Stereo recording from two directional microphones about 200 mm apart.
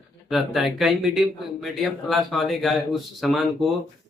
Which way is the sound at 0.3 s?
Centre (ahead or behind).